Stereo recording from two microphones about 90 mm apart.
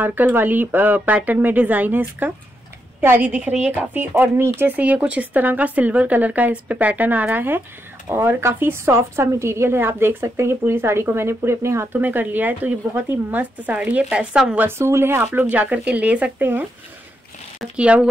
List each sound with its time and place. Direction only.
0.0 s a woman's voice: 20° right (ahead or behind)
14.8 s a woman's voice: 30° right (ahead or behind)
17.7 s speech: 15° right (ahead or behind)